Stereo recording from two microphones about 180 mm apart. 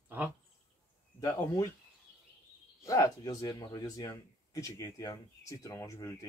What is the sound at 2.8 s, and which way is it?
A man's voice, 15° left (ahead or behind).